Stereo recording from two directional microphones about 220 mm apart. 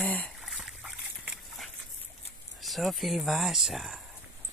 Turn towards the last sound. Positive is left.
turn(degrees=0)  # may be behind; listen again after turning